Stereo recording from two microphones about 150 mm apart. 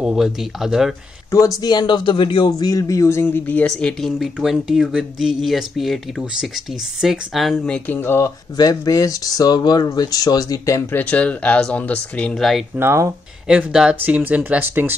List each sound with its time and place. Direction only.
0.0 s speech: centre (ahead or behind)
1.3 s speech: 20° left (ahead or behind); by 12.6 s centre (ahead or behind)
12.7 s speech: 15° right (ahead or behind)
13.5 s speech: 5° right (ahead or behind)